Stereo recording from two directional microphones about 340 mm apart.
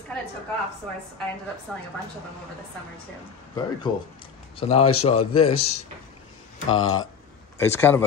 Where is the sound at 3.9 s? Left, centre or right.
Centre.